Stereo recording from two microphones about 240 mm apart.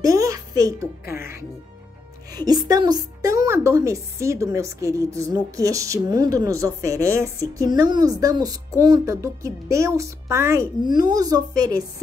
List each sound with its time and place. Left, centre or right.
0.0 s music: centre
1.1 s a woman's voice: centre